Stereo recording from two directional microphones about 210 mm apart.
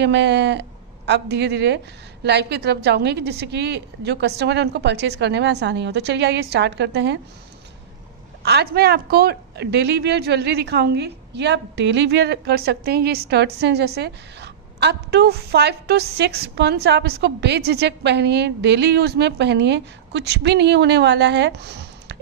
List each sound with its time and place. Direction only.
0.0 s a woman's voice: 55° right (ahead or behind)
8.4 s a woman's voice: 50° right (ahead or behind)